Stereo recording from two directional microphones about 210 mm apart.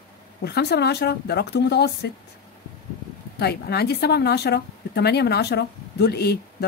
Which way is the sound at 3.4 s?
50° left (ahead or behind).